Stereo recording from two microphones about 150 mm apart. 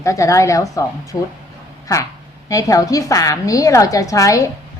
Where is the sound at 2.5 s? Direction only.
20° left (ahead or behind).